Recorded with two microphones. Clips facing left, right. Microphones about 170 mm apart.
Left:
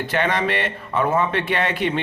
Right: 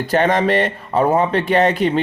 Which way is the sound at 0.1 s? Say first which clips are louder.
Right 7 dB; 45° right (ahead or behind).